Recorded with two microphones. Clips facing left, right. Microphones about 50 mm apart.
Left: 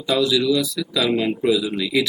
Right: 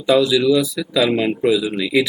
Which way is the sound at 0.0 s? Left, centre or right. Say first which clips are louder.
Right 4 dB; centre.